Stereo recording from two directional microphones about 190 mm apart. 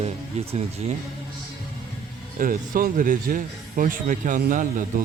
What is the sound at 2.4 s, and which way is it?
Speech, 45° right (ahead or behind).